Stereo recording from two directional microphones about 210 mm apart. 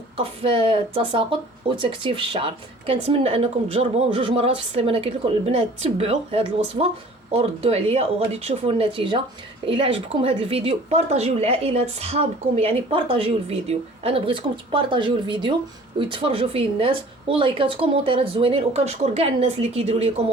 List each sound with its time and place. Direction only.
0.2 s speech: 25° right (ahead or behind)